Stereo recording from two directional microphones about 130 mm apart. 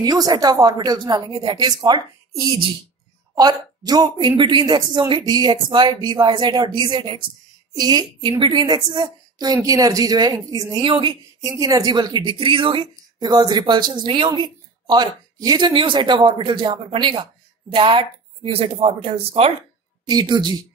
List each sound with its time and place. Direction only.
0.0 s a woman's voice: 30° right (ahead or behind)
10.9 s a woman's voice: 40° right (ahead or behind)
11.4 s a woman's voice: 25° right (ahead or behind); by 19.5 s 50° right (ahead or behind)
20.1 s a woman's voice: 35° right (ahead or behind)